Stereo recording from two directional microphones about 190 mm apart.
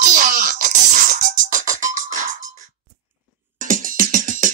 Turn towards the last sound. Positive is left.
turn(degrees=-40)  # may be behind; listen again after turning